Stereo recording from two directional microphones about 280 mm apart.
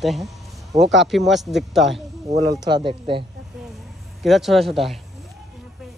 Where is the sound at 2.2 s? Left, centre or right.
Centre.